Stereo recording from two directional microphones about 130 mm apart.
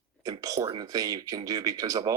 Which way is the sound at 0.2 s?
25° right (ahead or behind).